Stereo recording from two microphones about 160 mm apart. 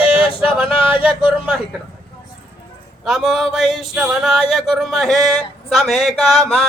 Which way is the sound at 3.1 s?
5° right (ahead or behind).